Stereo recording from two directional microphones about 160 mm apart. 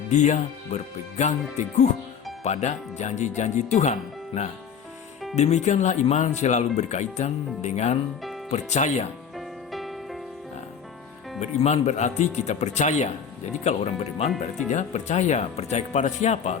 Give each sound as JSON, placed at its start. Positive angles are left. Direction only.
{"t": 0.1, "sound": "speech", "side_deg": 50}
{"t": 5.3, "sound": "speech", "side_deg": 45}
{"t": 9.3, "sound": "music", "side_deg": 0}
{"t": 11.3, "sound": "speech", "side_deg": 45}